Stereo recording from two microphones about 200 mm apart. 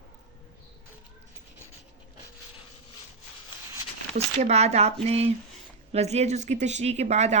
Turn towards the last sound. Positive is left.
turn(degrees=-35)  # may be behind; listen again after turning